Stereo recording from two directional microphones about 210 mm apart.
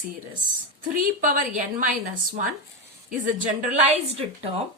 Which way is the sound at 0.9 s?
40° right (ahead or behind).